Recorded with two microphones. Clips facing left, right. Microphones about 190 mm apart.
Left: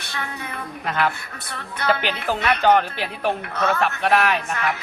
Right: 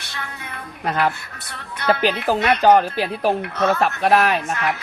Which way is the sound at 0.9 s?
40° right (ahead or behind).